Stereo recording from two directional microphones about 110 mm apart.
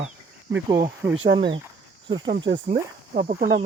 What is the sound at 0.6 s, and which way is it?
Speech, 25° right (ahead or behind).